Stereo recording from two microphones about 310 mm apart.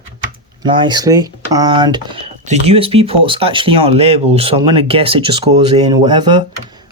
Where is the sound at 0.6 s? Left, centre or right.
Centre.